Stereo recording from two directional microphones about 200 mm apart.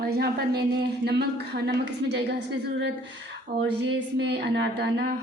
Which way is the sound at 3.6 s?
60° right (ahead or behind).